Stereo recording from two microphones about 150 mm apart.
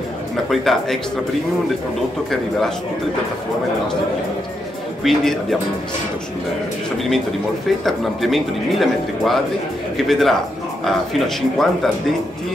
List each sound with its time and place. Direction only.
0.5 s speech: centre (ahead or behind)
5.0 s speech: centre (ahead or behind)
7.8 s speech: centre (ahead or behind)
11.5 s speech: centre (ahead or behind)